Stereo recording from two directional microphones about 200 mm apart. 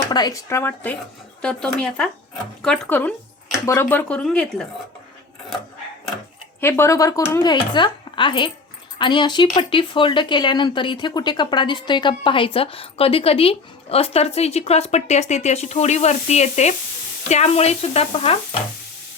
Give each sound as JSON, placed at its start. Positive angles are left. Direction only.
{"t": 0.1, "sound": "speech", "side_deg": 20}
{"t": 6.6, "sound": "speech", "side_deg": 10}
{"t": 17.2, "sound": "stir", "side_deg": 35}